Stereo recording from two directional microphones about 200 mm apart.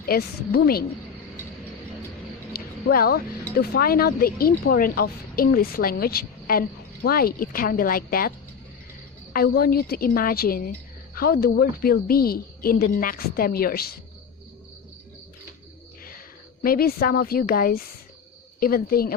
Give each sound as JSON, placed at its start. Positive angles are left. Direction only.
{"t": 0.0, "sound": "speech", "side_deg": 50}
{"t": 2.5, "sound": "speech", "side_deg": 50}
{"t": 9.3, "sound": "speech", "side_deg": 50}
{"t": 16.6, "sound": "speech", "side_deg": 50}